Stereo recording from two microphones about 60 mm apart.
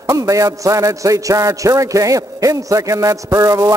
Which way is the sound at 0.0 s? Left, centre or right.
Right.